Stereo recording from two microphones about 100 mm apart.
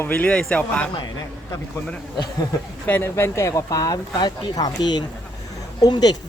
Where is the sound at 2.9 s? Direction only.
25° left (ahead or behind).